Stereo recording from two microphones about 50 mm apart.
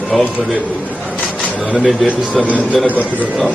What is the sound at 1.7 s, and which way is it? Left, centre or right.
Speech, centre.